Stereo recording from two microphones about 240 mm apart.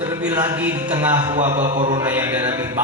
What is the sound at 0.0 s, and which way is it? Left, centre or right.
Speech, centre.